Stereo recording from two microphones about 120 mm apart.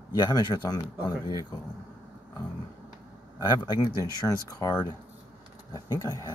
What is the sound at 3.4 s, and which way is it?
A man's voice, 35° left (ahead or behind).